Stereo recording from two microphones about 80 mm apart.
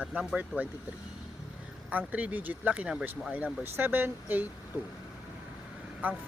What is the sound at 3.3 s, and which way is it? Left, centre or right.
Speech, right.